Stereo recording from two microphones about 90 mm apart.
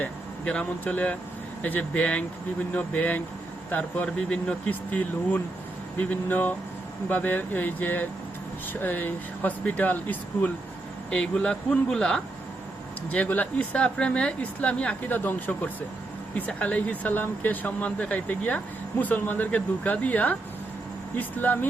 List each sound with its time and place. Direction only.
0.0 s speech: 10° left (ahead or behind)